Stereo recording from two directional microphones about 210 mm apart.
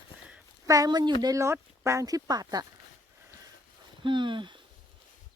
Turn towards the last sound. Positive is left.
turn(degrees=-20)  # may be behind; listen again after turning